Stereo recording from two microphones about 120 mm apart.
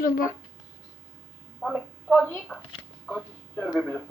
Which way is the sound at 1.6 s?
5° right (ahead or behind).